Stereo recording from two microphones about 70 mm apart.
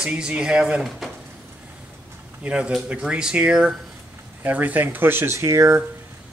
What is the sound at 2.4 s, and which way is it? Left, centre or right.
A man's voice, centre.